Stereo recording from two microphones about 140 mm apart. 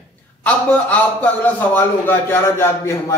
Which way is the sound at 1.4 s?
15° left (ahead or behind).